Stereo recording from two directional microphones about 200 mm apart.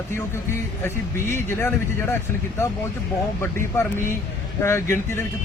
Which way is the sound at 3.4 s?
10° left (ahead or behind).